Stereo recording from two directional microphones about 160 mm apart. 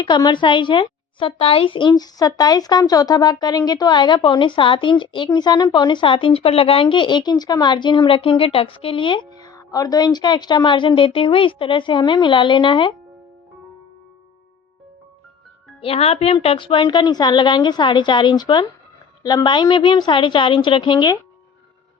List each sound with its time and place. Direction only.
0.0 s speech: 30° left (ahead or behind)
15.8 s speech: 35° left (ahead or behind)